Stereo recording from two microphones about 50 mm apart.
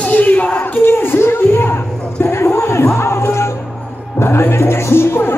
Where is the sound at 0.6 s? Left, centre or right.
Left.